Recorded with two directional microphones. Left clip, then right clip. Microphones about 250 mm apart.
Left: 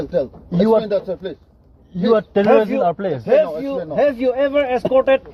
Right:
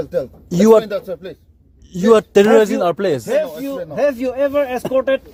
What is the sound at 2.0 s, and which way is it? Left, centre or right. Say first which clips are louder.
Speech: right 3 dB; right.